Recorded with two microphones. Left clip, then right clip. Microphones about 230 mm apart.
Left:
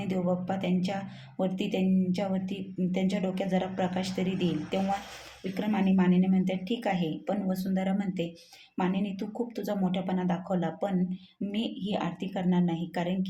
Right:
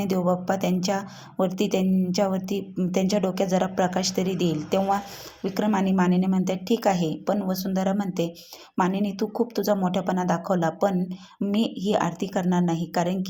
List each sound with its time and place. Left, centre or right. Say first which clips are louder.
0.0 s speech: right 7 dB; right